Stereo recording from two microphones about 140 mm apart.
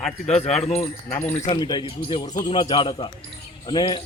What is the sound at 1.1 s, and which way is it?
Speech, 15° left (ahead or behind).